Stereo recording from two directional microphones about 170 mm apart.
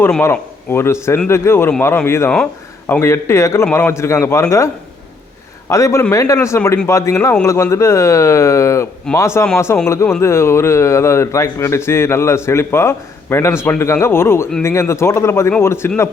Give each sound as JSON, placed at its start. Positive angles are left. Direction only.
{"t": 0.0, "sound": "a man's voice", "side_deg": 15}